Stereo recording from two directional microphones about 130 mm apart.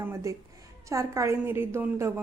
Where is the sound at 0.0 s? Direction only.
20° right (ahead or behind).